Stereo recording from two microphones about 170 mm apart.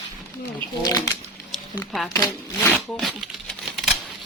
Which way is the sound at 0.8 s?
20° left (ahead or behind).